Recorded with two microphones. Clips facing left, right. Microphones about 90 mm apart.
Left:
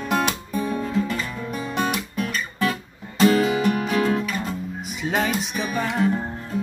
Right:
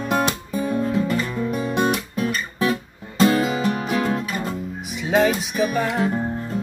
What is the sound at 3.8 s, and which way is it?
Music, 5° right (ahead or behind).